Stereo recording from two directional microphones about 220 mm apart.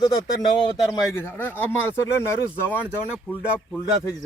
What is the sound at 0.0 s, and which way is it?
Speech, 20° left (ahead or behind).